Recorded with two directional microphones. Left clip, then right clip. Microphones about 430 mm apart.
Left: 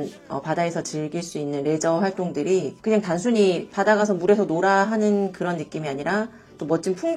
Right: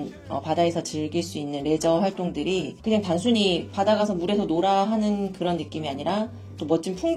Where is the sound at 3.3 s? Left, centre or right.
Left.